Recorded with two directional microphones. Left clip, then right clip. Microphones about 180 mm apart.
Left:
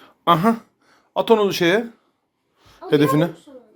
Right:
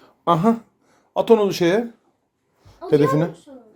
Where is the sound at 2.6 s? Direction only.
Centre (ahead or behind).